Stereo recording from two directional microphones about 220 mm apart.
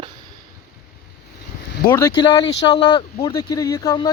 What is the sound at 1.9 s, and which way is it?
Speech, 15° left (ahead or behind).